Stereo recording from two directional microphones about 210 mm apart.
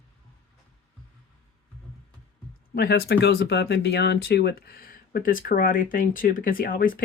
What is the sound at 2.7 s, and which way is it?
Speech, 50° left (ahead or behind).